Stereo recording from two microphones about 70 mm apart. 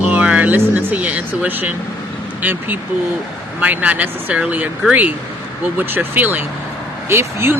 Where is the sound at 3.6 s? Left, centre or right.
Right.